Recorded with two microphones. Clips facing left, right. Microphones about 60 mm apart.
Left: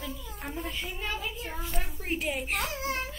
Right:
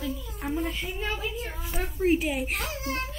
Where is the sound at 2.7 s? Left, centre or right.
Left.